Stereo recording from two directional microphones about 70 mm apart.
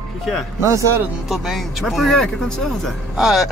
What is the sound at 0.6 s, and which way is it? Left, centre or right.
Speech, right.